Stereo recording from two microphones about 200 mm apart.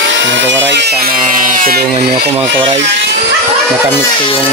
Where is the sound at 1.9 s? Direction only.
25° right (ahead or behind).